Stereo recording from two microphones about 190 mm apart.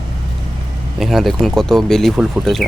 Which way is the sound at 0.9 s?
Centre (ahead or behind).